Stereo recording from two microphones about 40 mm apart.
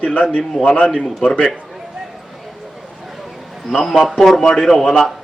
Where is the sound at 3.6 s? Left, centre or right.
Centre.